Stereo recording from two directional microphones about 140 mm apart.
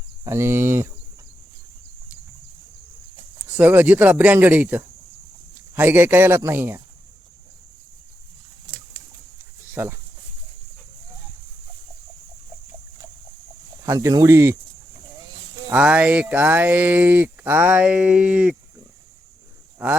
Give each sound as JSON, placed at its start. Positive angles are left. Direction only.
{"t": 0.3, "sound": "speech", "side_deg": -20}
{"t": 3.6, "sound": "speech", "side_deg": -15}
{"t": 9.7, "sound": "speech", "side_deg": -15}
{"t": 13.8, "sound": "speech", "side_deg": -25}
{"t": 15.7, "sound": "speech", "side_deg": -10}